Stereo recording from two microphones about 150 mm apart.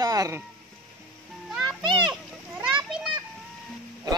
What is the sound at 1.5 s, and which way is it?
Children playing, centre (ahead or behind).